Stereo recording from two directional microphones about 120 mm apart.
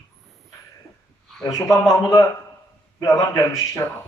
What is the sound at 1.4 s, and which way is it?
Speech, 25° left (ahead or behind).